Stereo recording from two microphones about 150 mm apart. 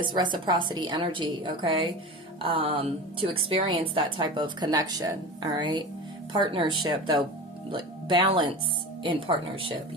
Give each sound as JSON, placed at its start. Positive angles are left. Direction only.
{"t": 0.0, "sound": "speech", "side_deg": -30}